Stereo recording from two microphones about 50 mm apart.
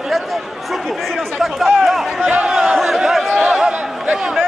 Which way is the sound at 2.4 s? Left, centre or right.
Centre.